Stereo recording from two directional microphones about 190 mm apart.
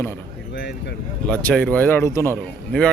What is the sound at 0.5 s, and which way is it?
Speech, 65° left (ahead or behind).